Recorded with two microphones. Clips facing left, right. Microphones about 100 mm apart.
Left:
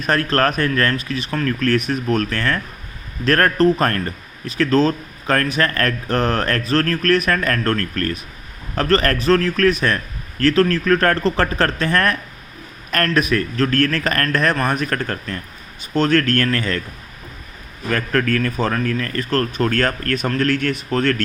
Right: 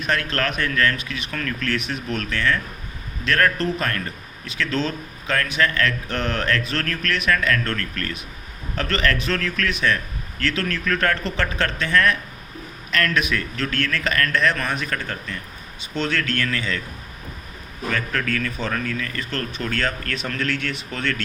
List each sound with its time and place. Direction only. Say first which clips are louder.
0.0 s a man's voice: left 6 dB; 40° left (ahead or behind)
17.9 s a man's voice: left 7 dB; 50° left (ahead or behind)